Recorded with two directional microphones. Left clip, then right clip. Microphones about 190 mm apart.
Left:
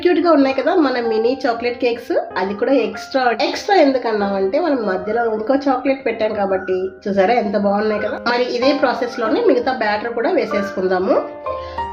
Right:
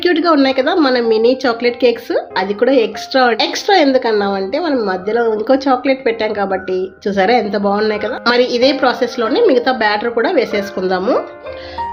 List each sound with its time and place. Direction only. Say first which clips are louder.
0.0 s a woman's voice: right 1 dB; 35° right (ahead or behind)